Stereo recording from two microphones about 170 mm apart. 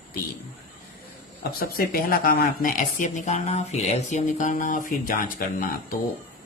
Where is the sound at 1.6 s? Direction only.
60° left (ahead or behind).